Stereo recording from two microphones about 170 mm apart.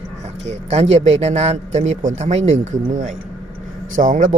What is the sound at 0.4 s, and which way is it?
A man's voice, 40° right (ahead or behind).